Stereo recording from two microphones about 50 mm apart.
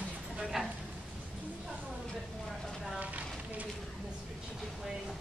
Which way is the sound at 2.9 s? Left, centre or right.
Right.